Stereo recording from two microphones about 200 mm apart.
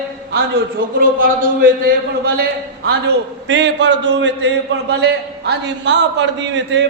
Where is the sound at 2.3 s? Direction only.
50° right (ahead or behind).